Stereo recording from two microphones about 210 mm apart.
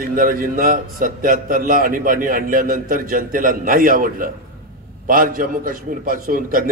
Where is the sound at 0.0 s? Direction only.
40° right (ahead or behind).